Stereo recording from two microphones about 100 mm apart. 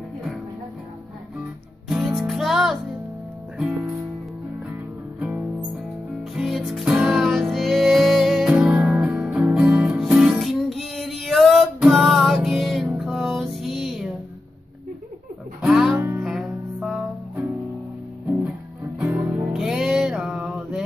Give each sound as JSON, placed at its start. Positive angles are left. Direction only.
{"t": 1.9, "sound": "music", "side_deg": -5}
{"t": 5.2, "sound": "music", "side_deg": -15}
{"t": 6.3, "sound": "music", "side_deg": 0}
{"t": 12.8, "sound": "music", "side_deg": -10}
{"t": 15.6, "sound": "music", "side_deg": -5}
{"t": 18.9, "sound": "music", "side_deg": -15}
{"t": 19.5, "sound": "music", "side_deg": -5}